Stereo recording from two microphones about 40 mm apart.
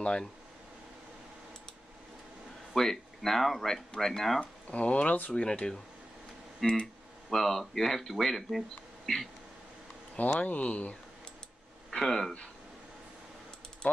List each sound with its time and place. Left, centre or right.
2.7 s speech: centre
4.4 s speech: left
5.3 s speech: left
7.2 s speech: centre
10.1 s speech: left
11.9 s speech: centre